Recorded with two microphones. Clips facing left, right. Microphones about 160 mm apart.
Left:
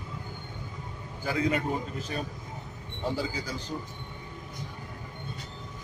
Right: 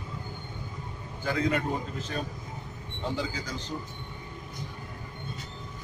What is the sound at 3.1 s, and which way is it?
Speech, 10° left (ahead or behind).